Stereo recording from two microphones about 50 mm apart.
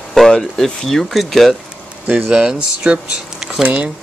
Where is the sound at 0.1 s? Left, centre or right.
Centre.